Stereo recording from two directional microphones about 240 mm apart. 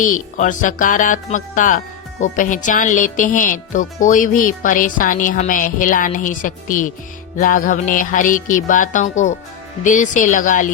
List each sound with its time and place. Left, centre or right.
0.0 s speech: left